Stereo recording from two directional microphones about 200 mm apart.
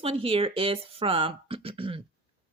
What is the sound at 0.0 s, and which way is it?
Speech, 30° right (ahead or behind).